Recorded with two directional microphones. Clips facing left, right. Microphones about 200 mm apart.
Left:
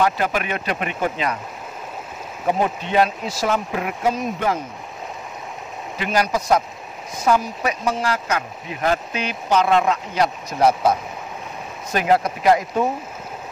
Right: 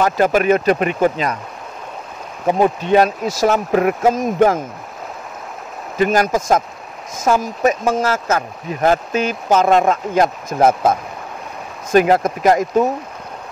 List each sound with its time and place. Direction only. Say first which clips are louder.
0.0 s speech: right 6 dB; 45° right (ahead or behind)
2.9 s speech: right 5 dB; 45° right (ahead or behind)
5.9 s speech: right 6 dB; 45° right (ahead or behind)